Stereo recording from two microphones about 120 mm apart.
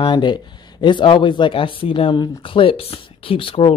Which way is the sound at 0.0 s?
40° left (ahead or behind).